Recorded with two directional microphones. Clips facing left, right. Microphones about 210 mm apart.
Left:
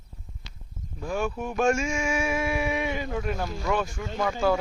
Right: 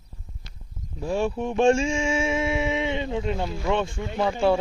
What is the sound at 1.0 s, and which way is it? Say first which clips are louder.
Mantra: right 4 dB; 30° right (ahead or behind).